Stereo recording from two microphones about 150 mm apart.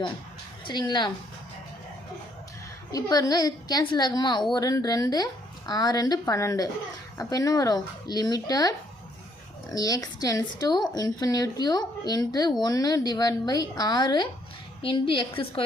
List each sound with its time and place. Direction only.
0.7 s a woman's voice: 30° left (ahead or behind)
2.9 s speech: 25° left (ahead or behind)
9.7 s a woman's voice: 25° left (ahead or behind)